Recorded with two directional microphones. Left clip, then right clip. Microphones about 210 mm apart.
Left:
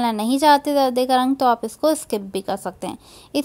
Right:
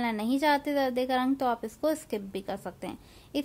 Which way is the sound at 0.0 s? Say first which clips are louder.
Left 10 dB; 30° left (ahead or behind).